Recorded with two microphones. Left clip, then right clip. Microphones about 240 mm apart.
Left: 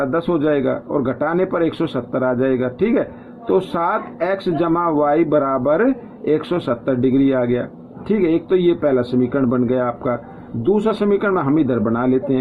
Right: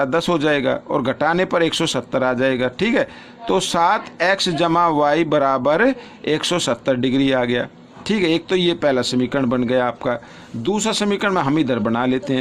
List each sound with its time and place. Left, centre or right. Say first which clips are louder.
0.0 s speech: even; right